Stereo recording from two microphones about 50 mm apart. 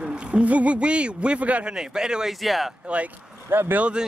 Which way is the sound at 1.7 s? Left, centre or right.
Centre.